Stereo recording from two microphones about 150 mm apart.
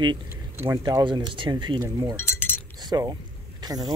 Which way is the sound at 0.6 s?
20° right (ahead or behind).